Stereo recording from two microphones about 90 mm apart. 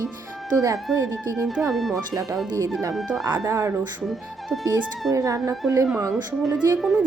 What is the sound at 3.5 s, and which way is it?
Speech, 30° right (ahead or behind).